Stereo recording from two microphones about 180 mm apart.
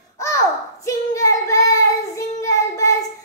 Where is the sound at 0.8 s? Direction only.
15° left (ahead or behind).